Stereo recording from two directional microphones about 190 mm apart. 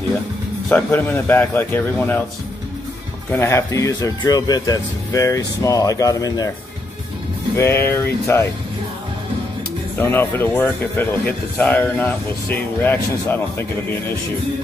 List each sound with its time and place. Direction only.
0.7 s speech: 10° left (ahead or behind)
3.3 s speech: 15° left (ahead or behind)
7.5 s speech: 15° left (ahead or behind)
9.9 s speech: 10° left (ahead or behind)